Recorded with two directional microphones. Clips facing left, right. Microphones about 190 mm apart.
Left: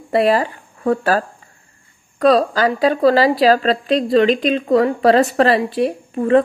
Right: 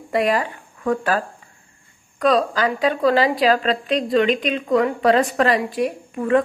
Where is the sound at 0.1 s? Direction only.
35° left (ahead or behind).